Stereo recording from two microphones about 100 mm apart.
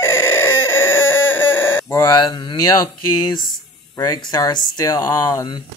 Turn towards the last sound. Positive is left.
turn(degrees=45)  # may be behind; listen again after turning